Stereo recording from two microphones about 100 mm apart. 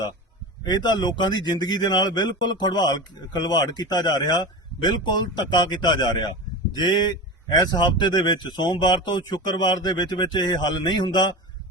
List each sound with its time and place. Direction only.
0.6 s speech: 45° left (ahead or behind)